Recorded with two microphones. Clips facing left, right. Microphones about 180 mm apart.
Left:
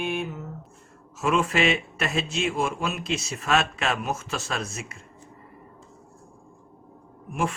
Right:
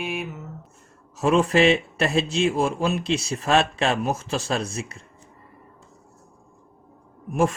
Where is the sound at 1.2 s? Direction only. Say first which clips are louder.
Right 5 dB; 35° right (ahead or behind).